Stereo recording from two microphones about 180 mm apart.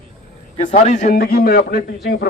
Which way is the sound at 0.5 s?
35° left (ahead or behind).